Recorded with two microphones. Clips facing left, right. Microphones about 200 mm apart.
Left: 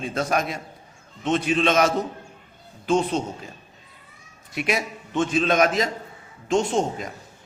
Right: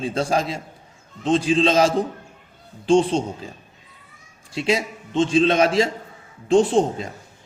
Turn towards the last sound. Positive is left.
turn(degrees=-30)  # may be behind; listen again after turning